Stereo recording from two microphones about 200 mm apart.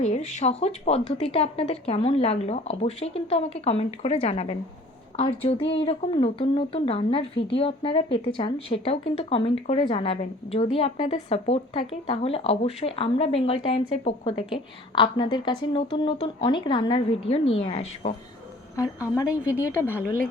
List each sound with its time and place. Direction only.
0.0 s speech: 35° left (ahead or behind)
19.1 s a woman's voice: 15° left (ahead or behind)